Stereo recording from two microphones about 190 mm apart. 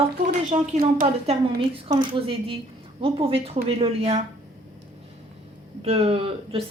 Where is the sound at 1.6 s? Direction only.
25° right (ahead or behind).